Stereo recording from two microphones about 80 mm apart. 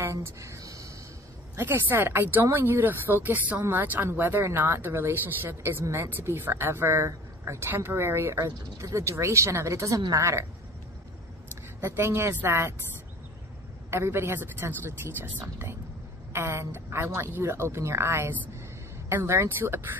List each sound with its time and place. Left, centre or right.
0.0 s a sound: right
1.6 s speech: right
11.8 s speech: right
13.8 s speech: right